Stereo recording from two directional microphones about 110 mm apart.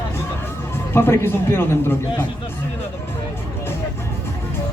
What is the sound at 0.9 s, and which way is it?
A man's voice, 20° left (ahead or behind).